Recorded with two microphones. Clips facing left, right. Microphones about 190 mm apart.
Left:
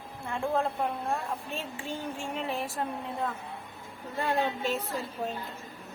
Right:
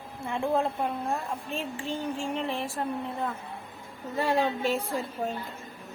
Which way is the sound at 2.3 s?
5° left (ahead or behind).